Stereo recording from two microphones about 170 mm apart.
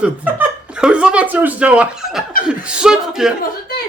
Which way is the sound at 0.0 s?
10° right (ahead or behind).